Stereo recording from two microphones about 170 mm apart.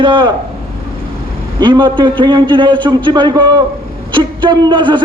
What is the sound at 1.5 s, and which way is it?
A man's voice, 25° right (ahead or behind).